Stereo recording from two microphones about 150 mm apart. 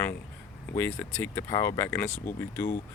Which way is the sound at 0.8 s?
10° left (ahead or behind).